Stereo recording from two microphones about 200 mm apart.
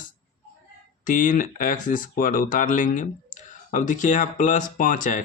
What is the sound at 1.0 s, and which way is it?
Speech, 40° left (ahead or behind).